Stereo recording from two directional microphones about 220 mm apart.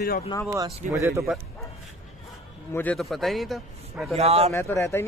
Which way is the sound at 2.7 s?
5° left (ahead or behind).